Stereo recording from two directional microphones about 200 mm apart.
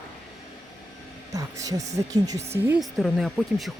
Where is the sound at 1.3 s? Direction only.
15° right (ahead or behind).